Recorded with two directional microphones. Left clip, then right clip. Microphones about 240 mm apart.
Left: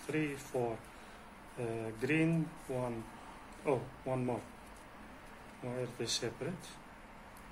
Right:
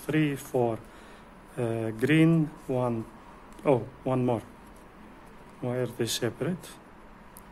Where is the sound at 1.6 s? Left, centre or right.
Right.